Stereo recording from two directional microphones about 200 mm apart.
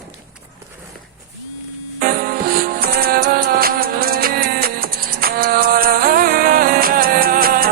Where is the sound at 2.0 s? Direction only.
45° right (ahead or behind).